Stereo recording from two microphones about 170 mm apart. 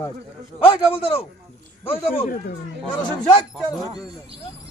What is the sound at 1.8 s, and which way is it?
Speech, 35° left (ahead or behind).